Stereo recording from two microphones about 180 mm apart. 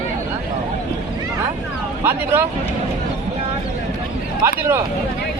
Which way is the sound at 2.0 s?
10° right (ahead or behind).